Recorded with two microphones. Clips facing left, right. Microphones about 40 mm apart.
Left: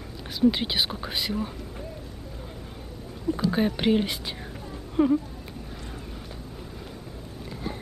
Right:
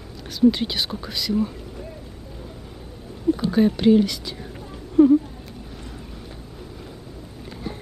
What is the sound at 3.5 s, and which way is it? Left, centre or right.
Speech, left.